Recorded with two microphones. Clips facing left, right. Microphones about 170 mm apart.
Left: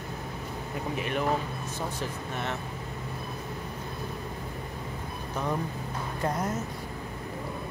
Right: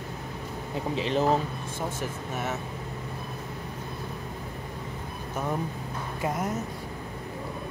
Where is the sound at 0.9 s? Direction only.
25° right (ahead or behind).